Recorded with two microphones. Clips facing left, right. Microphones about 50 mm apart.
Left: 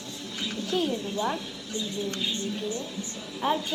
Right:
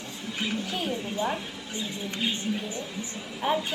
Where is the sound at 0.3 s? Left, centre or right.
Right.